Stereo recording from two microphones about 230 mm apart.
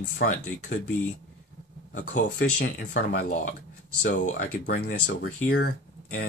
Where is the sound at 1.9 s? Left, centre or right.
Left.